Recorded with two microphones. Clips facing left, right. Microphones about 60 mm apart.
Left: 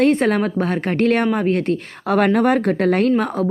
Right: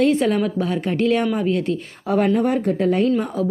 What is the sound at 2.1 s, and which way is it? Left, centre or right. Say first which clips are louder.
Speech: left 3 dB; left.